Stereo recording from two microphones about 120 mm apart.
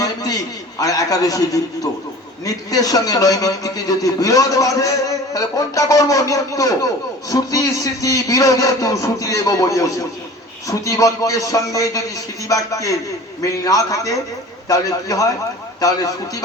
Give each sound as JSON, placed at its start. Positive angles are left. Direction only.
{"t": 0.0, "sound": "a man's voice", "side_deg": 30}